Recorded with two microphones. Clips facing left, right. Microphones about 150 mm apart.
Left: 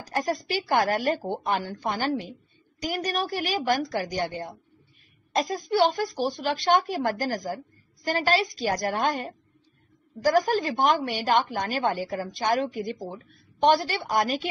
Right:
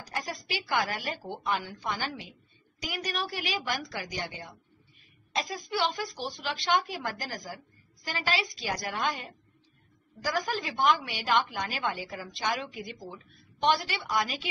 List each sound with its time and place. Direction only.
0.5 s a woman's voice: 45° left (ahead or behind)